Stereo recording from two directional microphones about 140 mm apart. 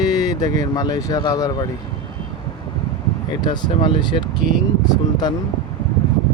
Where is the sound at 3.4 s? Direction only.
35° left (ahead or behind).